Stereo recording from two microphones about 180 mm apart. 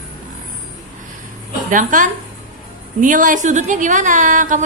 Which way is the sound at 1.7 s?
45° right (ahead or behind).